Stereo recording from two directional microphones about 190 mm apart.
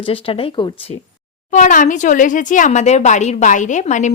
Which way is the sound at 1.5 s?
40° left (ahead or behind).